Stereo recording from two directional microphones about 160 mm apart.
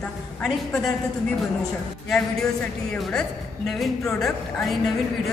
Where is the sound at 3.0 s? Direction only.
5° left (ahead or behind).